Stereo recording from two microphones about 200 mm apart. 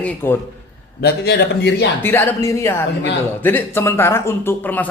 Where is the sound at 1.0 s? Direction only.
55° left (ahead or behind).